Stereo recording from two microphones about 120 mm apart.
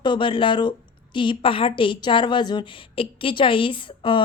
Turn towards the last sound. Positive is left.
turn(degrees=45)  # may be behind; listen again after turning